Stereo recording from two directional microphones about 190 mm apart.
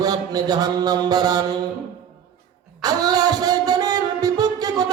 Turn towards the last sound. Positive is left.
turn(degrees=-20)  # may be behind; listen again after turning